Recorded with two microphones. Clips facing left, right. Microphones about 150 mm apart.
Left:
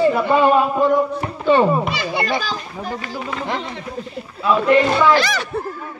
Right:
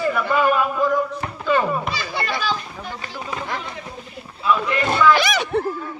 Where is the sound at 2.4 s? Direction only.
40° left (ahead or behind).